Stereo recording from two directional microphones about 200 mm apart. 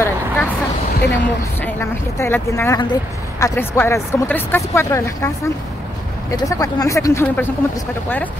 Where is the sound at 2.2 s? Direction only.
15° left (ahead or behind).